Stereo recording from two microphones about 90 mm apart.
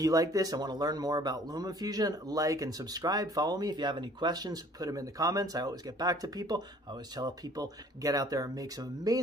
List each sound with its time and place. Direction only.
0.0 s speech: 40° right (ahead or behind)